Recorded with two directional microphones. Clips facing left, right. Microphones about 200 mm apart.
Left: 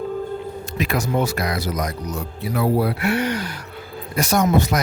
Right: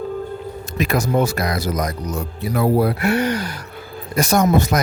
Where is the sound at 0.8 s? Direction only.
45° right (ahead or behind).